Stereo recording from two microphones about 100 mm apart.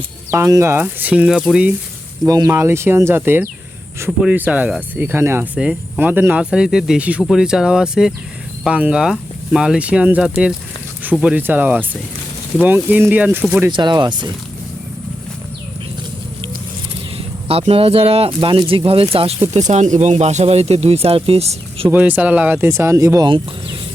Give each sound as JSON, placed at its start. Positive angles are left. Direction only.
{"t": 0.4, "sound": "speech", "side_deg": -30}
{"t": 2.2, "sound": "speech", "side_deg": -35}
{"t": 2.5, "sound": "speech", "side_deg": -25}
{"t": 6.4, "sound": "speech", "side_deg": -5}
{"t": 13.7, "sound": "speech", "side_deg": -50}
{"t": 17.2, "sound": "speech", "side_deg": -80}
{"t": 19.7, "sound": "speech", "side_deg": -90}
{"t": 21.8, "sound": "speech", "side_deg": -20}
{"t": 23.2, "sound": "speech", "side_deg": -50}